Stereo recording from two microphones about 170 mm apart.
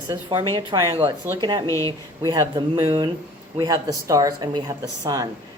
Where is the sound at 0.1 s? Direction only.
25° right (ahead or behind).